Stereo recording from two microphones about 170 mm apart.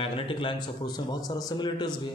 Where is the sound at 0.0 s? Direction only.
30° left (ahead or behind).